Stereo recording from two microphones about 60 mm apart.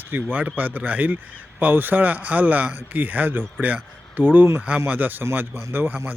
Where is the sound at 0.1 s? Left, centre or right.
Right.